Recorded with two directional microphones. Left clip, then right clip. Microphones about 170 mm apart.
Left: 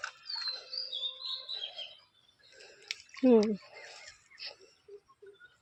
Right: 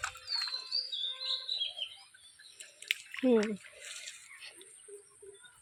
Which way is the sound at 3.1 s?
10° left (ahead or behind).